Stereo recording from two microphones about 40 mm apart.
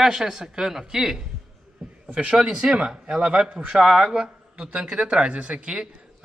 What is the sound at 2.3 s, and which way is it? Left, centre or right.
Speech, centre.